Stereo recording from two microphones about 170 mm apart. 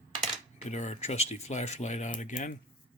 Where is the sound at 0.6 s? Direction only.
45° left (ahead or behind).